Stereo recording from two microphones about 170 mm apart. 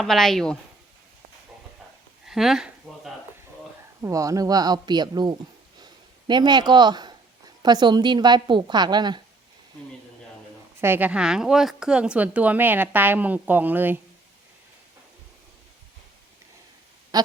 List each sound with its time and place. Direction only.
0.0 s a woman's voice: centre (ahead or behind)
2.2 s speech: centre (ahead or behind)
4.0 s a woman's voice: 20° right (ahead or behind)
5.8 s a sound: 25° right (ahead or behind)
7.6 s a woman's voice: 25° right (ahead or behind)
10.8 s speech: 15° right (ahead or behind)